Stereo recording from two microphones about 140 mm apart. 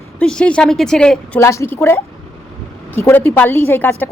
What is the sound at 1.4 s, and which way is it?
A woman's voice, 20° left (ahead or behind).